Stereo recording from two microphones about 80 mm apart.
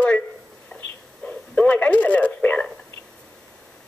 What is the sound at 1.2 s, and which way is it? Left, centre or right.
Speech, centre.